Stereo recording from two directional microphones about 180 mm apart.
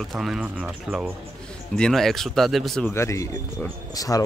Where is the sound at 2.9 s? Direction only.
15° left (ahead or behind).